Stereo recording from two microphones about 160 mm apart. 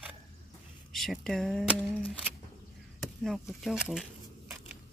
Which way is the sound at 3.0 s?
Centre (ahead or behind).